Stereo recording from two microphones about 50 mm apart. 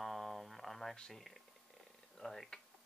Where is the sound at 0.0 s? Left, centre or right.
Centre.